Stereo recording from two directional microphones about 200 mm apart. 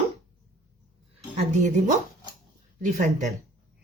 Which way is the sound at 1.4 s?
35° right (ahead or behind).